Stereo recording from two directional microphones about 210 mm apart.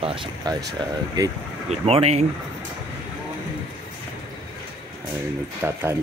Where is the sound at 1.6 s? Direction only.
30° right (ahead or behind).